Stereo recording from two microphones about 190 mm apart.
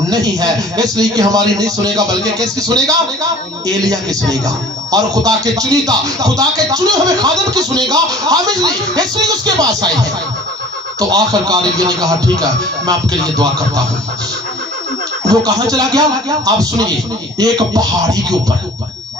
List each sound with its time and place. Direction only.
0.0 s a man's voice: 20° right (ahead or behind)
11.1 s a man's voice: 20° right (ahead or behind)
15.3 s a man's voice: 20° right (ahead or behind)